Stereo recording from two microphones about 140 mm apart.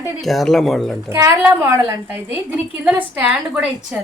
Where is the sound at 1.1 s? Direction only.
20° right (ahead or behind).